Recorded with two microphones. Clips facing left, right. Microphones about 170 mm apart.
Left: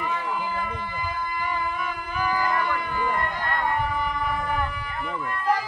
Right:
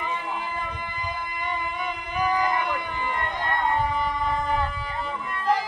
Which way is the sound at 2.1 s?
20° right (ahead or behind).